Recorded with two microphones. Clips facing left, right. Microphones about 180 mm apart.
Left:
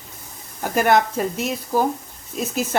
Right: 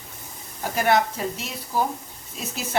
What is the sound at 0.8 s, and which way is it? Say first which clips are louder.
Speech: left 4 dB; 50° left (ahead or behind).